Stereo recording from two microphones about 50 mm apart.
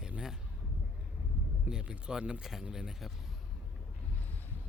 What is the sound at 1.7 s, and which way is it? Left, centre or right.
Speech, centre.